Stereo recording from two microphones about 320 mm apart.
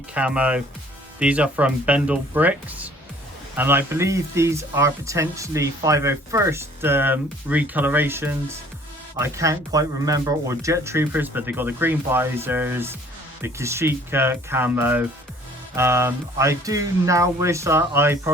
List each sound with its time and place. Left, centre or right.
0.1 s speech: centre